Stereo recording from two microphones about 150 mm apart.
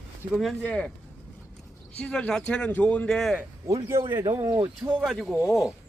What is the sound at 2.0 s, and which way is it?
A man's voice, 10° left (ahead or behind).